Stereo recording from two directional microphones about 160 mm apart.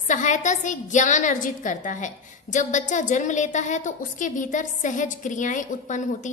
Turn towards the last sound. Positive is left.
turn(degrees=50)  # may be behind; listen again after turning